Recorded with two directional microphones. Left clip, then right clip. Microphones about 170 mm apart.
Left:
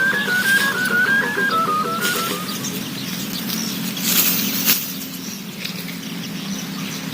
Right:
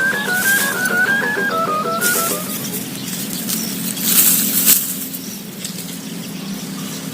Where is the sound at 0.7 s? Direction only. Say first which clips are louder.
Right 1 dB; 25° left (ahead or behind).